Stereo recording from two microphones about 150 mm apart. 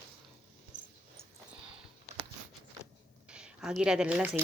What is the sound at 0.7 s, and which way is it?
Dog, 10° right (ahead or behind).